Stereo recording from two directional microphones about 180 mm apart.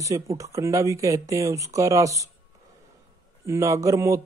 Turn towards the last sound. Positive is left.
turn(degrees=-15)  # may be behind; listen again after turning